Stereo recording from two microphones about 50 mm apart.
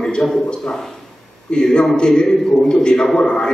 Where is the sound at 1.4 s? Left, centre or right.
Centre.